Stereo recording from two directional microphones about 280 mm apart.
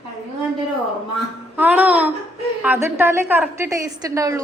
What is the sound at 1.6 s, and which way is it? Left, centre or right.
A woman's voice, centre.